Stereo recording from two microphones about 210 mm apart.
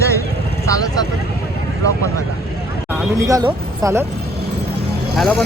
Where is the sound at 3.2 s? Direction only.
15° right (ahead or behind).